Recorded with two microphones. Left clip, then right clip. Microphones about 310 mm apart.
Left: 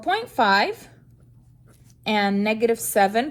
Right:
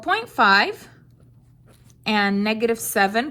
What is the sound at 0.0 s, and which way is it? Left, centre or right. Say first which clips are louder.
Speech: right 2 dB; right.